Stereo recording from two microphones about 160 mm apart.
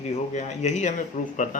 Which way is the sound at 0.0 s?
45° left (ahead or behind).